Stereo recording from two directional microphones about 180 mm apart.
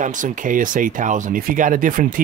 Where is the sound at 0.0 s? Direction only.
45° right (ahead or behind).